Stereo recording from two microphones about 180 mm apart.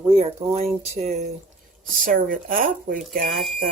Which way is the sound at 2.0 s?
50° right (ahead or behind).